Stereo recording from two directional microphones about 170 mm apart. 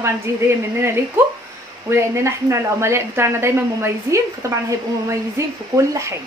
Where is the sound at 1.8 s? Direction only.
15° right (ahead or behind).